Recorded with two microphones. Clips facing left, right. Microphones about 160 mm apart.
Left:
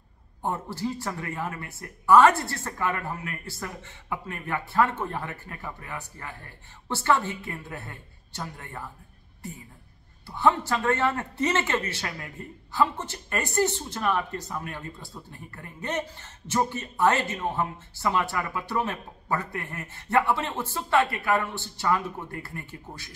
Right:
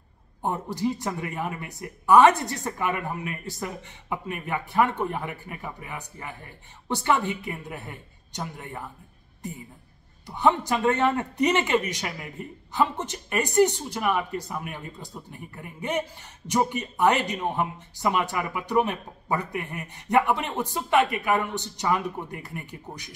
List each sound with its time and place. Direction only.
0.4 s a man's voice: 15° right (ahead or behind)
10.2 s a man's voice: 15° right (ahead or behind)